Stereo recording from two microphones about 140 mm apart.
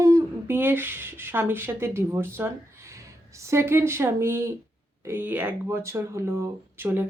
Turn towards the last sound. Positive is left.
turn(degrees=-15)  # may be behind; listen again after turning